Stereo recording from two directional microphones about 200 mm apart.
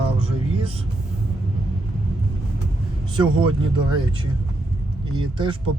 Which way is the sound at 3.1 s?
25° right (ahead or behind).